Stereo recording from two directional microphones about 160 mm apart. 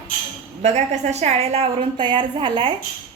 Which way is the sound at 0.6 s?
45° right (ahead or behind).